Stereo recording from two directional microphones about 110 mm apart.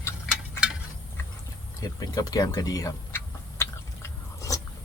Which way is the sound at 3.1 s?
25° left (ahead or behind).